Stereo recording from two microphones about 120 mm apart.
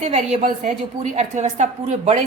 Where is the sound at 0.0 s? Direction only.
65° right (ahead or behind).